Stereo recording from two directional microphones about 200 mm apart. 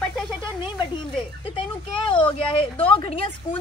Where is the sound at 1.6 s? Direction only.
25° left (ahead or behind).